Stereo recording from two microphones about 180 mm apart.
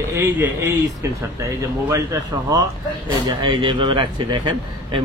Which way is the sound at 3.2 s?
25° right (ahead or behind).